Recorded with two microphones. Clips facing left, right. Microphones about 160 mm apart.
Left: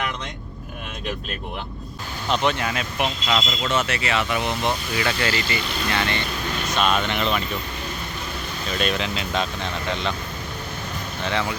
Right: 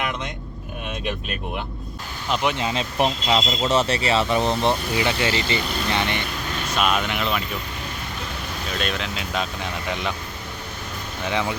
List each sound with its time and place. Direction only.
2.3 s speech: 10° right (ahead or behind)
2.6 s speech: 20° right (ahead or behind)
6.7 s speech: 5° right (ahead or behind)
8.7 s speech: centre (ahead or behind)
11.3 s speech: 15° right (ahead or behind)